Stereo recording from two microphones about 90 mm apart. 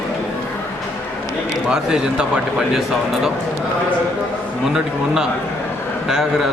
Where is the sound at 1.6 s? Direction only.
10° right (ahead or behind).